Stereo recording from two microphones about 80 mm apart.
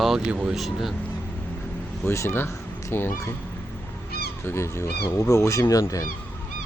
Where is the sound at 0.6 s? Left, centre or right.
Centre.